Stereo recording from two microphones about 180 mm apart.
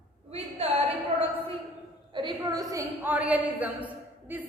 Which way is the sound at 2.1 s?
25° right (ahead or behind).